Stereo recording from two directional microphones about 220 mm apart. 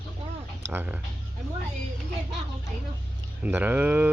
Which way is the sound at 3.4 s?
10° right (ahead or behind).